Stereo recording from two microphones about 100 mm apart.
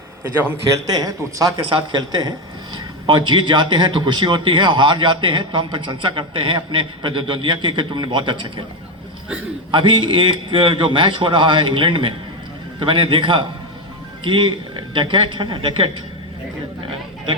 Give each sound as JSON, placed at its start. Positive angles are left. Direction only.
{"t": 0.9, "sound": "a man's voice", "side_deg": -40}
{"t": 9.7, "sound": "a man's voice", "side_deg": -55}